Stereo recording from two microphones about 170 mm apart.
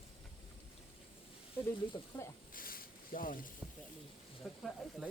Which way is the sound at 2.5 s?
55° left (ahead or behind).